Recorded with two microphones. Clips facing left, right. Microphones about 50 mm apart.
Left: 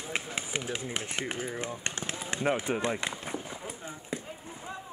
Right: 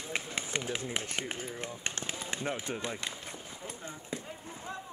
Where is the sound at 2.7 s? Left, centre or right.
Left.